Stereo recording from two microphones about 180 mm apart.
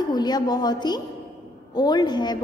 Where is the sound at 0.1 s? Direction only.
25° left (ahead or behind).